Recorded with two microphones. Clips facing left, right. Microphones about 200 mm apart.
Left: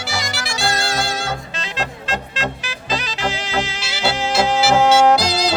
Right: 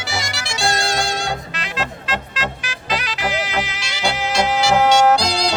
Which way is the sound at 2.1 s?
25° left (ahead or behind).